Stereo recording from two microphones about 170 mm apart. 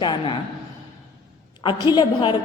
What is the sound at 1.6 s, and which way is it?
Speech, 30° left (ahead or behind).